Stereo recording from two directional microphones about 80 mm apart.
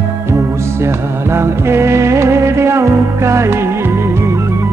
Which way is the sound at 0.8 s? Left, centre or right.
Right.